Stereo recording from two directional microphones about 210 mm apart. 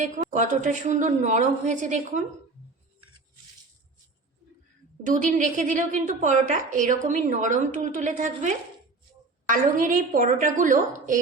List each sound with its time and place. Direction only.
0.0 s a woman's voice: 35° right (ahead or behind)
5.0 s a woman's voice: 35° right (ahead or behind)